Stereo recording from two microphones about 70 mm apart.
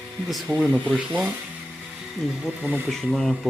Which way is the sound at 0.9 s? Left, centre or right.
Centre.